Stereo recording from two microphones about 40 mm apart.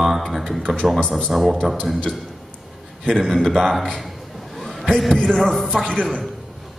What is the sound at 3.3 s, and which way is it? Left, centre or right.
Speech, centre.